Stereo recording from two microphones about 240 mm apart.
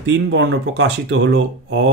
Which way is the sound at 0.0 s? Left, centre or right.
Right.